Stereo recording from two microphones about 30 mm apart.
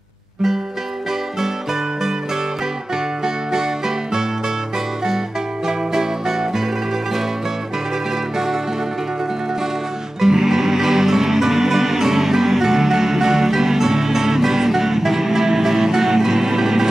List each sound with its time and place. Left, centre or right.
5.7 s music: centre
10.2 s music: centre